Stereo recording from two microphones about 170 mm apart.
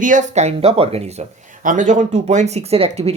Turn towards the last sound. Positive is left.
turn(degrees=-35)  # may be behind; listen again after turning